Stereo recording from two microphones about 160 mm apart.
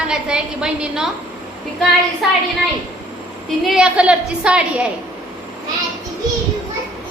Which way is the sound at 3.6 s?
5° right (ahead or behind).